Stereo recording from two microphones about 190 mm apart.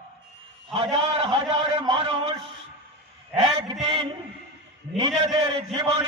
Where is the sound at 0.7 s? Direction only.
30° right (ahead or behind).